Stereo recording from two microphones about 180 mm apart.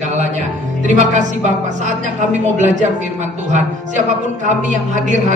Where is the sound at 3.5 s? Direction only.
40° right (ahead or behind).